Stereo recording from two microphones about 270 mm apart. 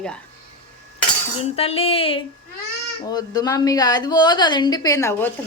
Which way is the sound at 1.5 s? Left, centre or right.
Left.